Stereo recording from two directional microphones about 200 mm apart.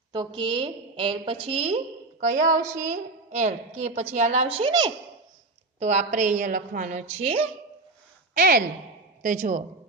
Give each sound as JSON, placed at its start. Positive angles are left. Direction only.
{"t": 0.1, "sound": "a woman's voice", "side_deg": -25}
{"t": 5.8, "sound": "a woman's voice", "side_deg": -35}
{"t": 8.4, "sound": "a woman's voice", "side_deg": -50}